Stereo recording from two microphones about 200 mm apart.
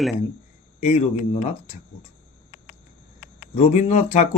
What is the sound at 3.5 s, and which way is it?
Speech, 35° left (ahead or behind).